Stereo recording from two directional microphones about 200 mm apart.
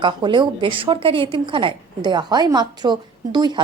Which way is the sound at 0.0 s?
20° right (ahead or behind).